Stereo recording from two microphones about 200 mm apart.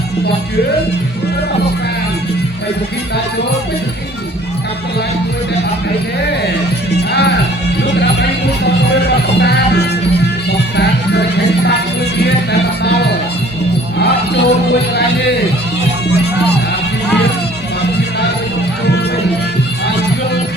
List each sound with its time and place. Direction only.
6.9 s music: 55° left (ahead or behind)
12.8 s music: 55° left (ahead or behind)